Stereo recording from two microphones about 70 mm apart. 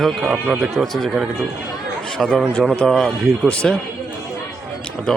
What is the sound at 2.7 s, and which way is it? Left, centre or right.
Speech, centre.